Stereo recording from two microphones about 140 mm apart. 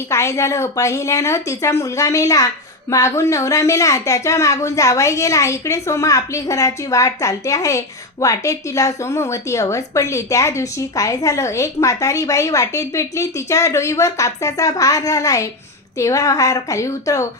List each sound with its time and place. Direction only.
0.1 s a woman's voice: 20° left (ahead or behind)